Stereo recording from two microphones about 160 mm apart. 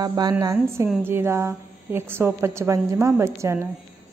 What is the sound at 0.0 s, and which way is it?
A woman's voice, 25° right (ahead or behind).